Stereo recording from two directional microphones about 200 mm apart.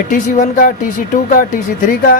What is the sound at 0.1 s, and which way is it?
Speech, 40° left (ahead or behind).